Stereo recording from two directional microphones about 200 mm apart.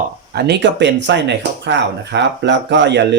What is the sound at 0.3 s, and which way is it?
Speech, 55° right (ahead or behind).